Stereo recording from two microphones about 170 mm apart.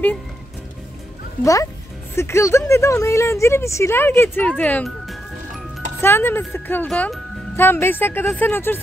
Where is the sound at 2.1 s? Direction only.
15° left (ahead or behind).